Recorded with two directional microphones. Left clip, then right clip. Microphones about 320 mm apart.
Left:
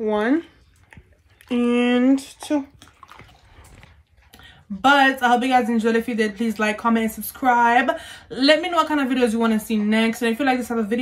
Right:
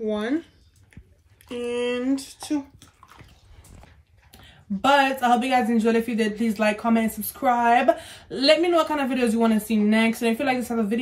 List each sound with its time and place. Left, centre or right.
0.0 s speech: left
1.5 s speech: left
4.3 s speech: centre